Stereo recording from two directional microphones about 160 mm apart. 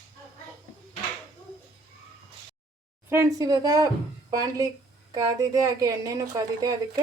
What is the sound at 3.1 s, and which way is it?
A woman's voice, 20° right (ahead or behind).